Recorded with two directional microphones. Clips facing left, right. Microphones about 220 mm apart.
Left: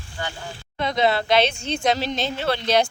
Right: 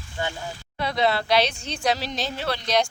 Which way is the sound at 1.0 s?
Centre (ahead or behind).